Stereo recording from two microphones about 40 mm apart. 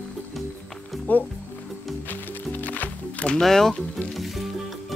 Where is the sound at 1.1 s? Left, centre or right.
Left.